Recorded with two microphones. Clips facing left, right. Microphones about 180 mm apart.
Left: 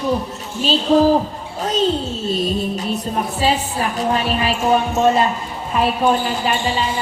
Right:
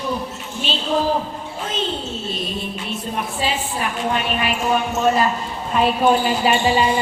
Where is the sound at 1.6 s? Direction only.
40° left (ahead or behind).